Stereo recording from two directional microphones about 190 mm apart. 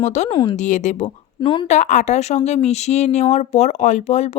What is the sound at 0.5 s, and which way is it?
Speech, 40° left (ahead or behind).